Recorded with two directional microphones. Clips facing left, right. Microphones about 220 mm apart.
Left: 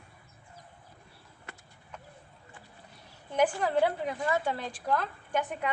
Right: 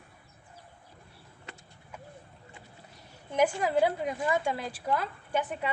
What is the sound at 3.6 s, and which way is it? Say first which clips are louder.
A woman's voice: right 1 dB; 10° right (ahead or behind).